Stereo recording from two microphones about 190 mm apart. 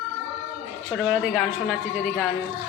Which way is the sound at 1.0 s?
5° right (ahead or behind).